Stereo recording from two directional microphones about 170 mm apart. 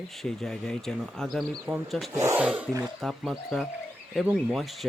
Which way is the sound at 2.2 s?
15° right (ahead or behind).